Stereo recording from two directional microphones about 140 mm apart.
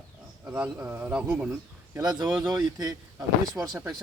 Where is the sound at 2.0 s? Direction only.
30° right (ahead or behind).